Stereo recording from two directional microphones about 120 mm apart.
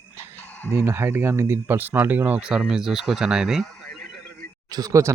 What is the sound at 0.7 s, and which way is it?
Speech, 20° right (ahead or behind).